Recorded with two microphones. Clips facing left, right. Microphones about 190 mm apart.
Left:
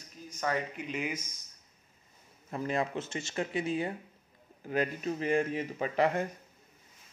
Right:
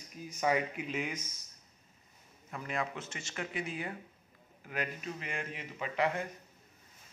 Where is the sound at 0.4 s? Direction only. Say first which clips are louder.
Right 2 dB; 10° right (ahead or behind).